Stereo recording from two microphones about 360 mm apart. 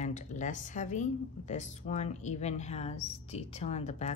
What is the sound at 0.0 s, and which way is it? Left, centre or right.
Speech, centre.